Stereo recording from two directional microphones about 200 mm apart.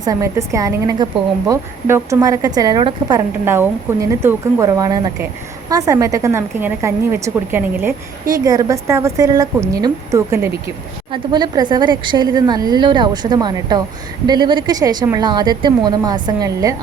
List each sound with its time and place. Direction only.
0.0 s a woman's voice: 15° right (ahead or behind)